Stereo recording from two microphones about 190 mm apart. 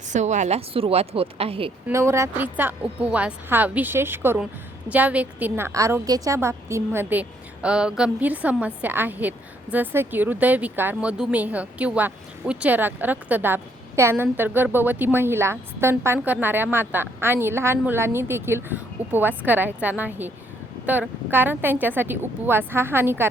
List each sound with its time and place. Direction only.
0.1 s a woman's voice: 40° right (ahead or behind)
1.9 s speech: 15° right (ahead or behind)